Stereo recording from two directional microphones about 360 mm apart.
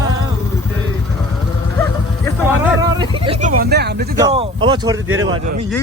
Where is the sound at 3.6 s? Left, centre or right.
Right.